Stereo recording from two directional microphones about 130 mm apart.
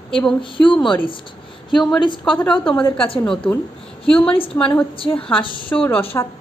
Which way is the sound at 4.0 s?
10° left (ahead or behind).